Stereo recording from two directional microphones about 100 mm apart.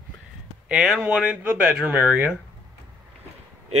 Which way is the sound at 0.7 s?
5° right (ahead or behind).